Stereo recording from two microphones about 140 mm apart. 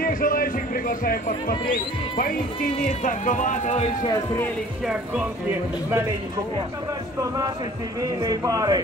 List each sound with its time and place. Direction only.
0.0 s speech: 85° left
2.8 s speech: 70° left (ahead or behind)
7.2 s speech: 25° right (ahead or behind)